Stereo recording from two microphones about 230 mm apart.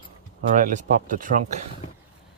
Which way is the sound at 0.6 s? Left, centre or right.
Right.